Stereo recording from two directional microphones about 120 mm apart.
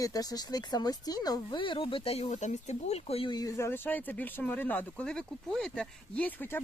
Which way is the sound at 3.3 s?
30° left (ahead or behind).